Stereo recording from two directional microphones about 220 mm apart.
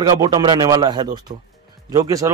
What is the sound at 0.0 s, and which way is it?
A man's voice, 20° right (ahead or behind).